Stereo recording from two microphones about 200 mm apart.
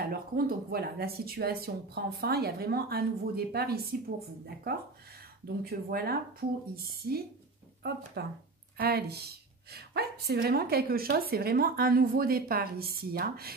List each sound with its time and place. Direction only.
0.0 s a woman's voice: 50° right (ahead or behind)
5.6 s a woman's voice: 50° right (ahead or behind)